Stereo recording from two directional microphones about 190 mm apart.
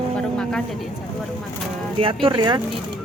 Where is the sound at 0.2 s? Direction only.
5° left (ahead or behind).